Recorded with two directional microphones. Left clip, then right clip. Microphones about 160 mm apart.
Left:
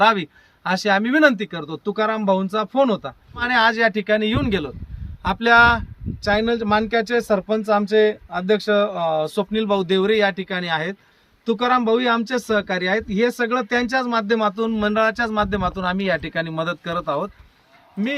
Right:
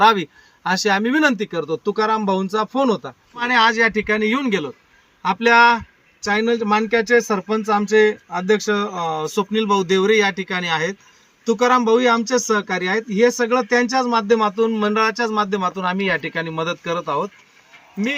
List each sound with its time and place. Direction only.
0.0 s speech: 25° left (ahead or behind)